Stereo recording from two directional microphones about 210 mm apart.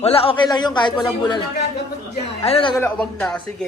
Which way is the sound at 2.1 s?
30° left (ahead or behind).